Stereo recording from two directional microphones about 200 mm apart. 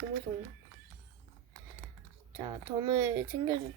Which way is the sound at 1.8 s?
5° left (ahead or behind).